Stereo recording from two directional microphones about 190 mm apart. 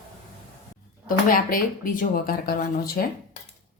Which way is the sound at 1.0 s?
50° left (ahead or behind).